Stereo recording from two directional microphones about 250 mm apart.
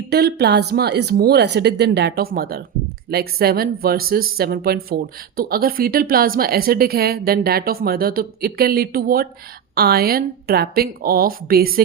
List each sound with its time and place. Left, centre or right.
0.1 s a woman's voice: right